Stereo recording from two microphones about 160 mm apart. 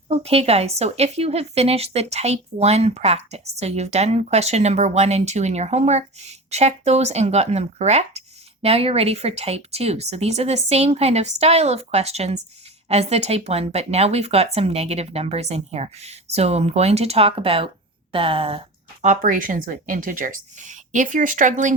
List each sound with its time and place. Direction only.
0.2 s a woman's voice: 40° right (ahead or behind)
19.0 s speech: 50° right (ahead or behind)